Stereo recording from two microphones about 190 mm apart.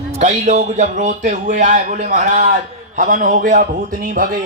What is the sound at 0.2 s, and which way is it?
A man's voice, 40° right (ahead or behind).